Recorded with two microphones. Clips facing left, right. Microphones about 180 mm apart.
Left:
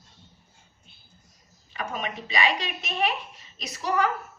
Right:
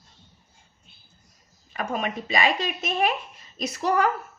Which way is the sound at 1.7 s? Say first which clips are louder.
Right 4 dB; 45° right (ahead or behind).